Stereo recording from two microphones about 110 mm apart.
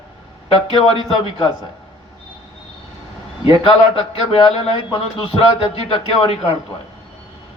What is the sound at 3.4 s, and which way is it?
Speech, 55° left (ahead or behind).